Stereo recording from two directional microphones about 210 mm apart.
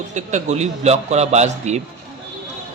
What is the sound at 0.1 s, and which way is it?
A man's voice, 35° right (ahead or behind).